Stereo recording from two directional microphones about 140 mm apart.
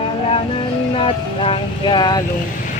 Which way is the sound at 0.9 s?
40° left (ahead or behind).